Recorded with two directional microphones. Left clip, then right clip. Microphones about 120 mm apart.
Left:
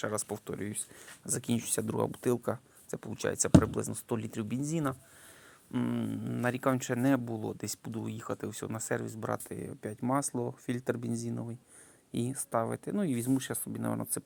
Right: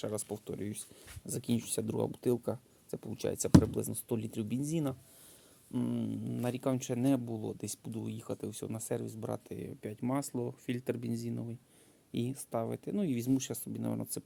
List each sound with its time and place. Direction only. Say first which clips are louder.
0.3 s speech: left 2 dB; 10° right (ahead or behind)
5.7 s speech: left 2 dB; centre (ahead or behind)